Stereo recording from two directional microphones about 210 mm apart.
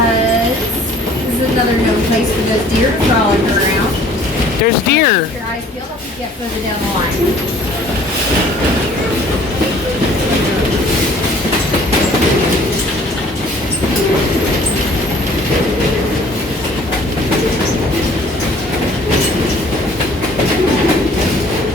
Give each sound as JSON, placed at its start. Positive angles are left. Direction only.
{"t": 4.6, "sound": "speech", "side_deg": 50}